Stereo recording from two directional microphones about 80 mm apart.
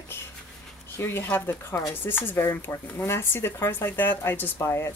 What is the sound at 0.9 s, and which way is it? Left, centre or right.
Speech, left.